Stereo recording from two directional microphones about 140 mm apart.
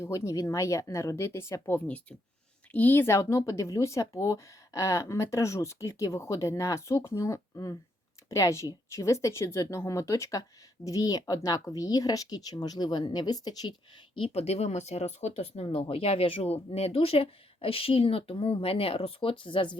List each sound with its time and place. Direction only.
0.0 s speech: 20° left (ahead or behind)
14.2 s speech: 50° left (ahead or behind)